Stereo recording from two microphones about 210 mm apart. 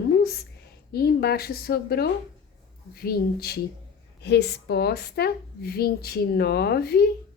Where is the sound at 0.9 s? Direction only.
50° left (ahead or behind).